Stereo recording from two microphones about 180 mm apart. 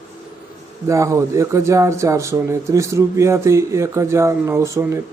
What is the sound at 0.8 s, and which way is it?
A man's voice, 15° right (ahead or behind).